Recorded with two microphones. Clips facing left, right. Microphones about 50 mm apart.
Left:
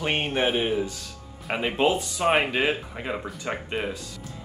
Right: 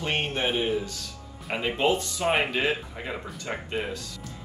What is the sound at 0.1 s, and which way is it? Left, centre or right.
Speech, left.